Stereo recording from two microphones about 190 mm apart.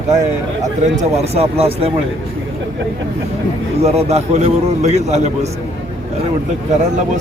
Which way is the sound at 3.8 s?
35° right (ahead or behind).